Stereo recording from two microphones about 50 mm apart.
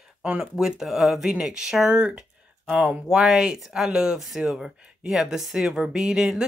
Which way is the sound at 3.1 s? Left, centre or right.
Centre.